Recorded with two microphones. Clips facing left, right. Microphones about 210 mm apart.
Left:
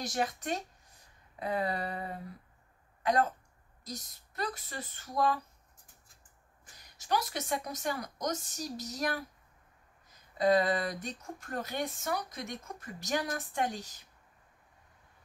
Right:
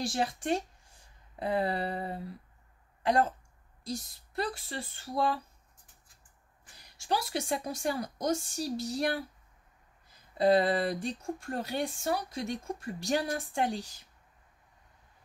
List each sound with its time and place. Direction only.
0.0 s speech: 30° right (ahead or behind)
3.0 s a sound: 30° right (ahead or behind)
3.8 s speech: 30° right (ahead or behind)
6.8 s speech: 30° right (ahead or behind)
10.3 s speech: 30° right (ahead or behind)